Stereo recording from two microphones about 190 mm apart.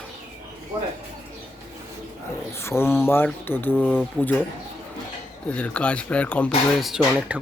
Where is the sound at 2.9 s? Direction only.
10° left (ahead or behind).